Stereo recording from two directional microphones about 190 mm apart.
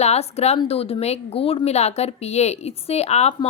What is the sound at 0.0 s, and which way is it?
A woman's voice, 35° left (ahead or behind).